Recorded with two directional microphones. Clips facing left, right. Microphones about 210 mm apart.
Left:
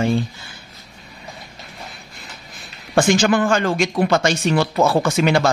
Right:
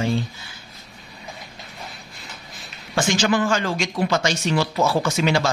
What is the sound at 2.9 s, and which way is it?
Speech, 55° left (ahead or behind).